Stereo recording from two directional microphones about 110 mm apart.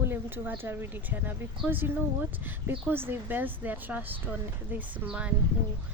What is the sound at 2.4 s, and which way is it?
A woman's voice, 20° right (ahead or behind).